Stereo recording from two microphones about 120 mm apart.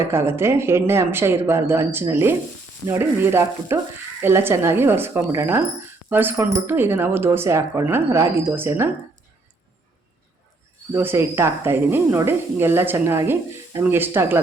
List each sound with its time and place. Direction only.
0.0 s speech: 20° right (ahead or behind)
10.9 s speech: 20° right (ahead or behind)